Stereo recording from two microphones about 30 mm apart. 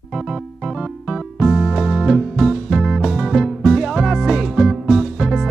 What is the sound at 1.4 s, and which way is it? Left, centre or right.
Music, centre.